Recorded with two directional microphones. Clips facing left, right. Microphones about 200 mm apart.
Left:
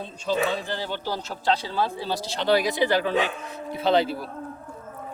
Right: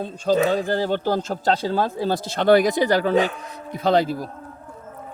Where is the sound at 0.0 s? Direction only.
45° right (ahead or behind).